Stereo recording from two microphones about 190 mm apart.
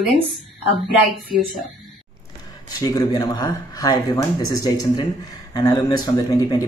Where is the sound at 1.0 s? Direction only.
Centre (ahead or behind).